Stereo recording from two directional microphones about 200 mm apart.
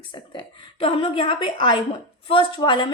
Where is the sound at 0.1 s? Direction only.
25° left (ahead or behind).